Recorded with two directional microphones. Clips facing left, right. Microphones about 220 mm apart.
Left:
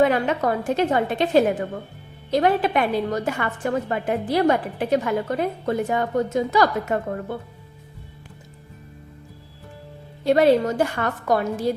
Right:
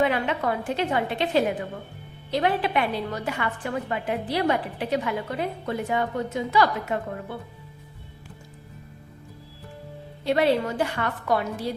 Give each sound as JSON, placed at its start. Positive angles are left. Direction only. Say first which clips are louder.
{"t": 0.0, "sound": "a woman's voice", "louder": "left 4 dB", "side_deg": 45}
{"t": 10.2, "sound": "a woman's voice", "louder": "left 5 dB", "side_deg": 45}